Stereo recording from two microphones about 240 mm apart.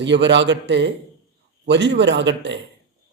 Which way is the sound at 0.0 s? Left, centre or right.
Right.